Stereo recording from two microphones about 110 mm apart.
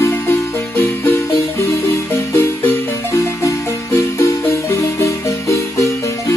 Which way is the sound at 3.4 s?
25° left (ahead or behind).